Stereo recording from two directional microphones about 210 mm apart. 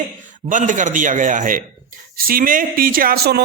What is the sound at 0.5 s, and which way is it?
A man's voice, 35° right (ahead or behind).